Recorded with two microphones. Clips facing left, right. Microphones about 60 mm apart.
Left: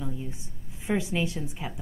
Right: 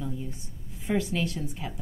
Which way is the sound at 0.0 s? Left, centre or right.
Centre.